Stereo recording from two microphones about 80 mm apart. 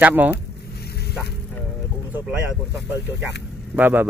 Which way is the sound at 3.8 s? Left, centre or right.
Right.